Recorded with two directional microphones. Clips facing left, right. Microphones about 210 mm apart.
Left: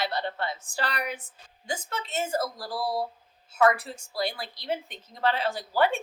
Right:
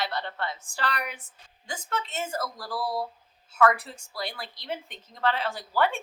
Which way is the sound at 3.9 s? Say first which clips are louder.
Left 5 dB; 35° left (ahead or behind).